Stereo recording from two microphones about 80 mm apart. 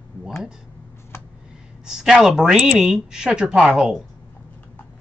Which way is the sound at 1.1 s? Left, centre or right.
Left.